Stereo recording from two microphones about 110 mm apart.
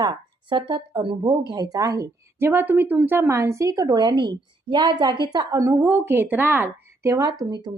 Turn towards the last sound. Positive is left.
turn(degrees=-40)  # may be behind; listen again after turning